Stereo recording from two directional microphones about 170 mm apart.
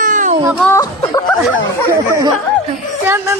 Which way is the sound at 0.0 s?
50° right (ahead or behind).